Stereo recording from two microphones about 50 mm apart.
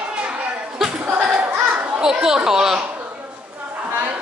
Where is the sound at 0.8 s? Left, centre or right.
Centre; by 2.0 s right.